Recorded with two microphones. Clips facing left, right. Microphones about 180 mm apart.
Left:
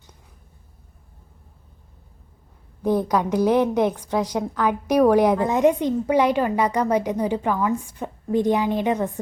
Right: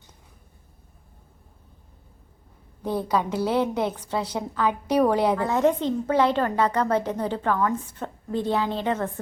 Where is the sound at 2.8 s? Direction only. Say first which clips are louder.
Left 4 dB; 15° left (ahead or behind).